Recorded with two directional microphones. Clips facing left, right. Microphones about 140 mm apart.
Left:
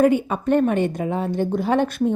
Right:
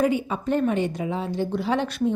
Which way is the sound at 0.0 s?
55° left (ahead or behind).